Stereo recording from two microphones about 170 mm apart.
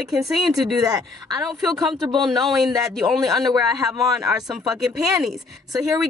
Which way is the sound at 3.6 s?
20° right (ahead or behind).